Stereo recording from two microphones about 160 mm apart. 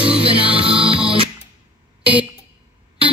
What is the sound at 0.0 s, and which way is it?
Music, 35° right (ahead or behind).